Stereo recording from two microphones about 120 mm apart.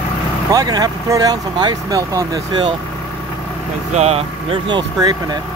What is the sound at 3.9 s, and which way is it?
Speech, 60° right (ahead or behind).